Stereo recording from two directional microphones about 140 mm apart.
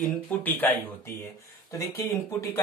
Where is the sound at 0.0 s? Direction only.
10° left (ahead or behind).